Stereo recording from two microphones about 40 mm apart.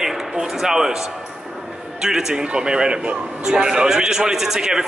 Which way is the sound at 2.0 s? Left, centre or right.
Centre.